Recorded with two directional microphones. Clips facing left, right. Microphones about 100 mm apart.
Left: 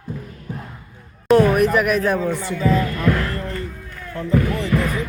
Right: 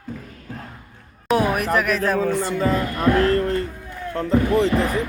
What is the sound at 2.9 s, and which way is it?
Speech, 25° right (ahead or behind).